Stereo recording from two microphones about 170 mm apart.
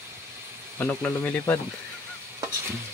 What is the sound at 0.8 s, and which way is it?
Speech, 10° left (ahead or behind).